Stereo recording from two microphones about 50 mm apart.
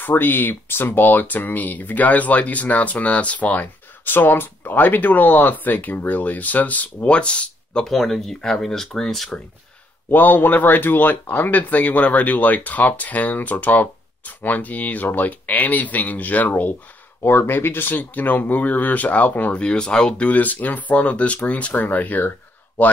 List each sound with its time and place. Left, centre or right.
0.0 s speech: left
7.8 s speech: centre
10.0 s speech: left
17.2 s speech: left
19.5 s speech: centre
20.2 s speech: left